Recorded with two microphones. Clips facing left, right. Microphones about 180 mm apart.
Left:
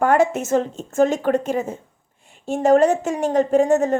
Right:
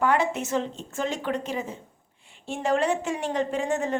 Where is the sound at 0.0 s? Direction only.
45° left (ahead or behind).